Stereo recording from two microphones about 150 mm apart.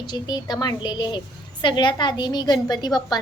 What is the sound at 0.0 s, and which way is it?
A woman's voice, 30° left (ahead or behind).